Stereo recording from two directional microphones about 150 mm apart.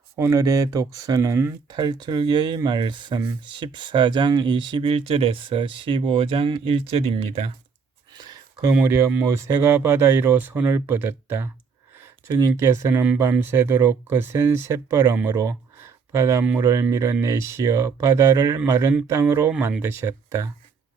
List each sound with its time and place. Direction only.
0.2 s speech: 20° right (ahead or behind); by 7.5 s 45° right (ahead or behind)
8.2 s a sound: 25° right (ahead or behind)
8.7 s speech: 15° right (ahead or behind)